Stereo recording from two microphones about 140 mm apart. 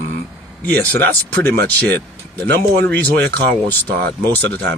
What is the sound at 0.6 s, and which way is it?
Speech, 10° left (ahead or behind).